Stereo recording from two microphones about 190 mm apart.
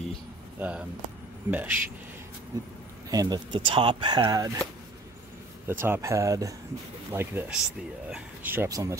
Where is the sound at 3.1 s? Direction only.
20° right (ahead or behind).